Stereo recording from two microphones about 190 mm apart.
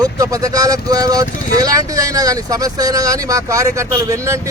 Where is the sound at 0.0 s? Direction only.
15° right (ahead or behind).